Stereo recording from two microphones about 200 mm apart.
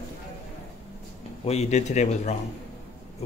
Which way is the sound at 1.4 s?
30° left (ahead or behind).